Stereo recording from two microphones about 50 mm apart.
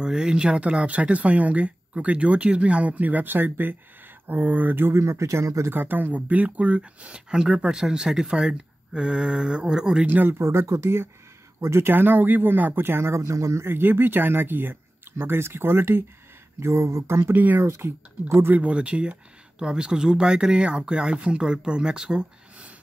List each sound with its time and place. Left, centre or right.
0.0 s speech: centre; by 4.9 s right
4.9 s speech: right
5.7 s speech: right; by 10.0 s centre
10.0 s speech: right
10.3 s speech: right
11.9 s speech: right
12.8 s speech: right
13.7 s speech: right
16.5 s speech: right
17.3 s speech: right
17.6 s speech: right
18.3 s speech: right
18.6 s speech: right